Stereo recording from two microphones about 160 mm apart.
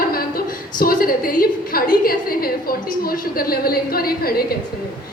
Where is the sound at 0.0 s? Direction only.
65° left (ahead or behind).